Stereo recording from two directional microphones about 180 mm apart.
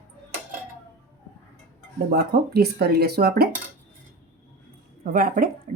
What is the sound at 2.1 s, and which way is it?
Speech, 60° right (ahead or behind).